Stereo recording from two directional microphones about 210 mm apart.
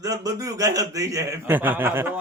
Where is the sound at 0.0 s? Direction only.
15° right (ahead or behind).